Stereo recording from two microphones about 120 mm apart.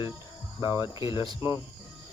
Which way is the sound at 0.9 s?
45° left (ahead or behind).